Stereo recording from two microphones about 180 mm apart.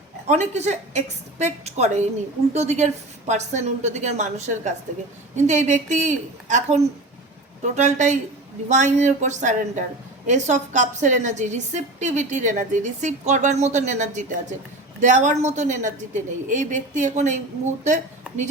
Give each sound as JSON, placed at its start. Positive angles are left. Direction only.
{"t": 0.3, "sound": "a woman's voice", "side_deg": -40}